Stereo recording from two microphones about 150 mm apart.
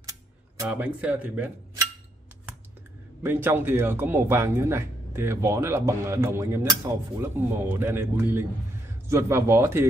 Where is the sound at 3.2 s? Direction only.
15° right (ahead or behind).